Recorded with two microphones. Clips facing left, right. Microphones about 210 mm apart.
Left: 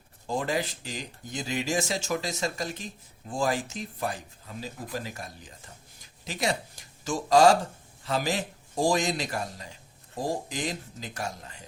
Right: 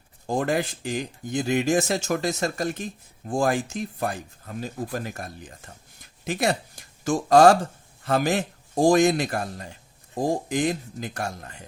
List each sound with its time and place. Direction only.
0.3 s speech: 50° right (ahead or behind)